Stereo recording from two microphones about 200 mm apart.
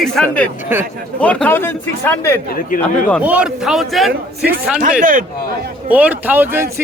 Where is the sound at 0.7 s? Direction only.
10° right (ahead or behind).